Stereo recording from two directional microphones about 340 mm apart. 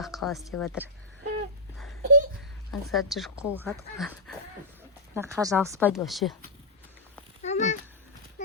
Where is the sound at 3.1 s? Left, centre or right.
Centre.